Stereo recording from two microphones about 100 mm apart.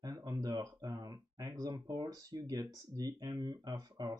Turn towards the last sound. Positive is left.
turn(degrees=-45)  # may be behind; listen again after turning